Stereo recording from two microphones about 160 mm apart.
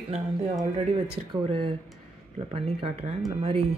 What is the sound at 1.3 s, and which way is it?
Speech, 30° right (ahead or behind).